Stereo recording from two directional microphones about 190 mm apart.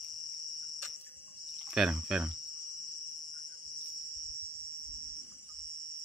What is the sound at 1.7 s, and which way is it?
Speech, 5° right (ahead or behind).